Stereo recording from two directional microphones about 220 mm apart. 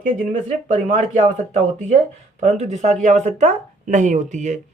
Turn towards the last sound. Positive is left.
turn(degrees=-35)  # may be behind; listen again after turning